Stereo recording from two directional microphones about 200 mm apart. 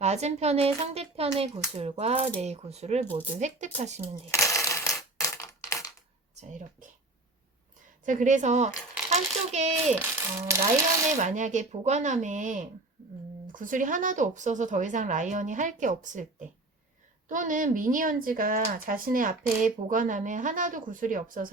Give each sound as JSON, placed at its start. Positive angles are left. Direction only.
{"t": 0.0, "sound": "speech", "side_deg": -35}
{"t": 4.3, "sound": "coin", "side_deg": 15}
{"t": 5.2, "sound": "crushing", "side_deg": 15}
{"t": 6.3, "sound": "speech", "side_deg": -35}
{"t": 8.0, "sound": "a child's voice", "side_deg": -40}
{"t": 11.2, "sound": "speech", "side_deg": -35}
{"t": 17.2, "sound": "speech", "side_deg": -40}